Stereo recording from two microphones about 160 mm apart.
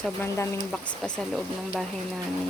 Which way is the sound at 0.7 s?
5° left (ahead or behind).